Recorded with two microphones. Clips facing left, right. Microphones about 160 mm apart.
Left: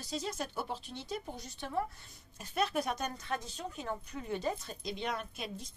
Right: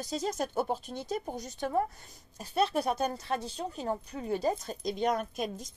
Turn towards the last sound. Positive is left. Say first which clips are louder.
# right 7 dB
turn(degrees=-45)  # may be behind; listen again after turning